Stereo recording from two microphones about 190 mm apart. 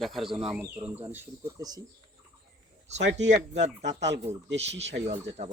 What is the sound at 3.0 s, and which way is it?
Speech, 70° right (ahead or behind).